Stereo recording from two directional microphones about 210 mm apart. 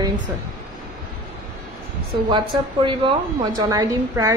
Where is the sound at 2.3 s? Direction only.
25° right (ahead or behind).